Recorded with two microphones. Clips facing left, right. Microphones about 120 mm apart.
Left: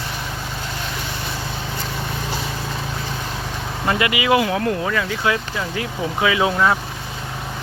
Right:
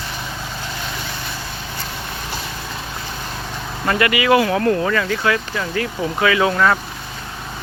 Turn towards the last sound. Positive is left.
turn(degrees=15)  # may be behind; listen again after turning